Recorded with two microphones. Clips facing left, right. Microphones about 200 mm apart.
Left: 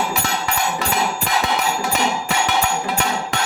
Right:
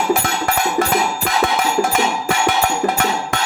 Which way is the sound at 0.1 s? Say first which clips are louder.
Right 5 dB; 50° right (ahead or behind).